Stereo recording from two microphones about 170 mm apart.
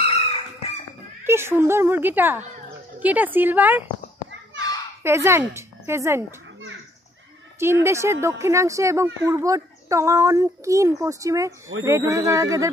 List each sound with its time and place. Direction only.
0.0 s chicken: 35° left (ahead or behind)
1.2 s speech: 15° right (ahead or behind)
5.0 s a woman's voice: 15° right (ahead or behind)
7.8 s speech: 15° right (ahead or behind)